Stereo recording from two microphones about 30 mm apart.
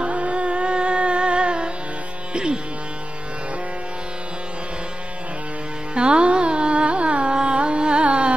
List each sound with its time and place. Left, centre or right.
0.0 s music: right
2.3 s speech: right
5.9 s music: right
6.2 s carnatic music: right